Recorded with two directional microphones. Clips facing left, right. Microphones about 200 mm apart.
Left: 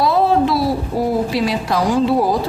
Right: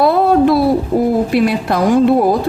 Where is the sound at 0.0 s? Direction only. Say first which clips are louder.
Right 4 dB; 55° right (ahead or behind).